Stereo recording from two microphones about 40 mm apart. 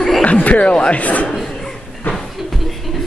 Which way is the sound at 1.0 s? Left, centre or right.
Left.